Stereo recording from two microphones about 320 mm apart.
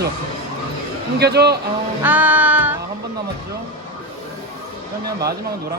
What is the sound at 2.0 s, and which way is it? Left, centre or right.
Speech, centre.